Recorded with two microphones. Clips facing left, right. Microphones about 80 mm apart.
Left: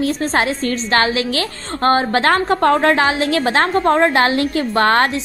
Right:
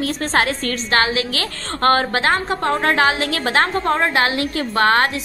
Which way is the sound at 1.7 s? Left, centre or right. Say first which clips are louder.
Left 1 dB; left.